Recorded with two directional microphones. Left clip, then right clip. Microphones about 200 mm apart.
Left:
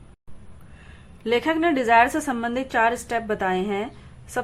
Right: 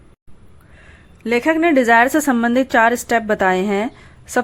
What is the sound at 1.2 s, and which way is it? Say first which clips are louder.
A woman's voice: right 5 dB; 25° right (ahead or behind).